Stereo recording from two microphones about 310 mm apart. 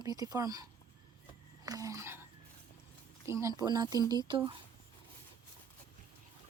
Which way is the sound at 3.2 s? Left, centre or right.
Centre.